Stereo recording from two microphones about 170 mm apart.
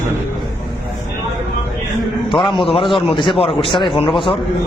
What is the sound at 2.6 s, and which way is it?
Speech, 30° left (ahead or behind).